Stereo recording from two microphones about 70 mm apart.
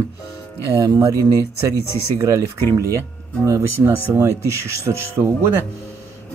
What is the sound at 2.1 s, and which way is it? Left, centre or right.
Speech, right.